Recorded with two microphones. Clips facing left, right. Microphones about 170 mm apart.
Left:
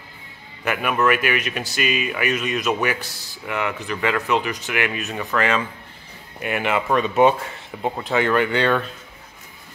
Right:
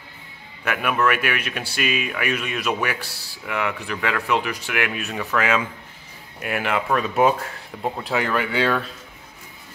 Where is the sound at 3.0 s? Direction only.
35° right (ahead or behind).